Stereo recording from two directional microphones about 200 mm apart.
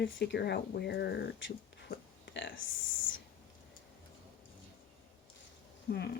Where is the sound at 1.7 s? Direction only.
60° left (ahead or behind).